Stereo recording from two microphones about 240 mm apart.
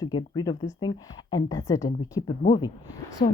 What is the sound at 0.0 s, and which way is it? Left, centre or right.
Speech, centre.